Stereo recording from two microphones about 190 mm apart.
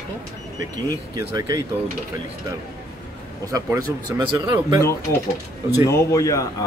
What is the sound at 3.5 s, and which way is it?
Speech, 15° right (ahead or behind).